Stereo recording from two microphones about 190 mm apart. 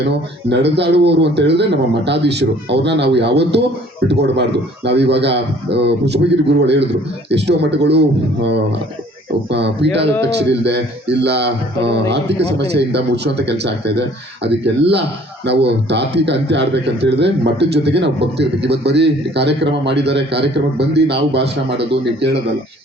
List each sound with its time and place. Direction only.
0.4 s speech: 65° right (ahead or behind)
10.1 s a man's voice: 15° left (ahead or behind)
10.6 s speech: 65° right (ahead or behind)
12.5 s speech: 65° right (ahead or behind)